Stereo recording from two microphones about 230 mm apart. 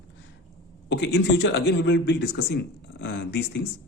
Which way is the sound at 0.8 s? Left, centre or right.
Left.